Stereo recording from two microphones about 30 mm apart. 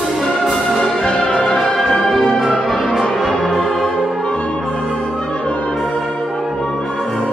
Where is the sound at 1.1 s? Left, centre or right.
Left.